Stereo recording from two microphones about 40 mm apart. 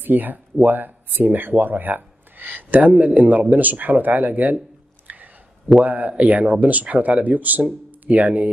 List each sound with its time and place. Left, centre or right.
0.0 s speech: right
5.0 s a sound: right
5.9 s speech: right